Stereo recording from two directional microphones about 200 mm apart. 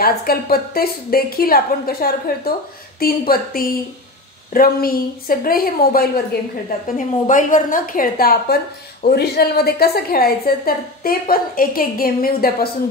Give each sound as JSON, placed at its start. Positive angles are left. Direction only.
{"t": 0.0, "sound": "a woman's voice", "side_deg": 50}
{"t": 7.2, "sound": "a woman's voice", "side_deg": 40}